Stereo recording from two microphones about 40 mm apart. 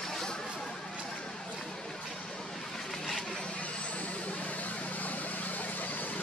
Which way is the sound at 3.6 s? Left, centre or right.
Left.